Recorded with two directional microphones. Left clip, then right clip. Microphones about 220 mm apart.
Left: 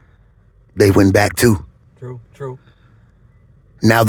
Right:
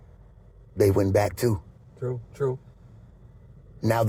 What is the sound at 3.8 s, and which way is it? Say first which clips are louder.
Speech: left 11 dB; 45° left (ahead or behind).